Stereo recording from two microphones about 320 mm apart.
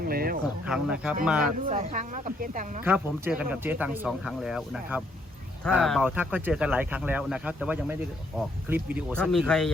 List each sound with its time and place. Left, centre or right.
0.0 s a sound: right
0.6 s speech: centre
1.5 s speech: right
2.8 s speech: centre